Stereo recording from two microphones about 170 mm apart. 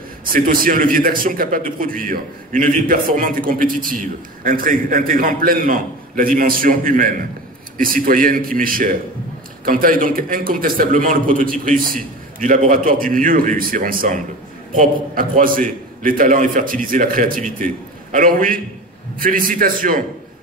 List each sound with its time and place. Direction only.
0.3 s a man's voice: 55° right (ahead or behind)